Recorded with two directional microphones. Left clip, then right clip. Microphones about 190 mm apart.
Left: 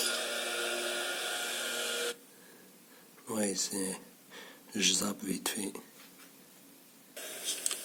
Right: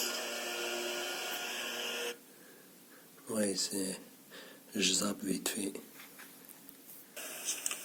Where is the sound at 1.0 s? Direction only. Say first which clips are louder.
Left 3 dB; 25° left (ahead or behind).